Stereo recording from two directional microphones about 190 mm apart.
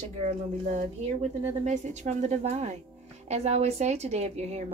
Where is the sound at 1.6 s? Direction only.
35° right (ahead or behind).